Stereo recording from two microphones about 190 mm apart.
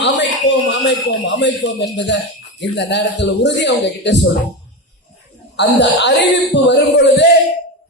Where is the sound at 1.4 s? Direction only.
65° left (ahead or behind).